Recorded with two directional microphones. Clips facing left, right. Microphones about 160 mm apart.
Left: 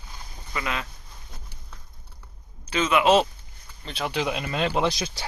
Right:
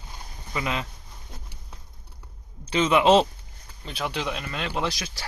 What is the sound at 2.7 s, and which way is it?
Speech, 25° right (ahead or behind).